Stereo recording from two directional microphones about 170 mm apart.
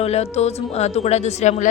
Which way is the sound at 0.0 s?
40° left (ahead or behind).